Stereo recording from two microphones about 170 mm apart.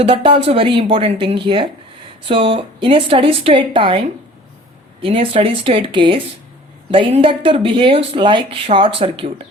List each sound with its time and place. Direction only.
0.0 s speech: 30° right (ahead or behind)
5.0 s speech: 30° right (ahead or behind)